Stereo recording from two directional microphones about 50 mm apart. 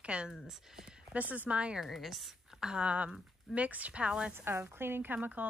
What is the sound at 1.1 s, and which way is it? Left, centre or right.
Speech, right.